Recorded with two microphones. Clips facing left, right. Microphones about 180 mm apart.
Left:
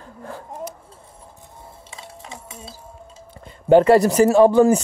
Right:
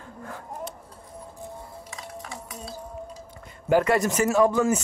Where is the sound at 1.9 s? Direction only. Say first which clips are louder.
Left 1 dB; 25° left (ahead or behind).